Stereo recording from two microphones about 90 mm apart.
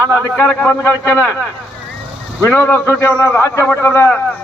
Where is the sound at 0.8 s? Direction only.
25° left (ahead or behind).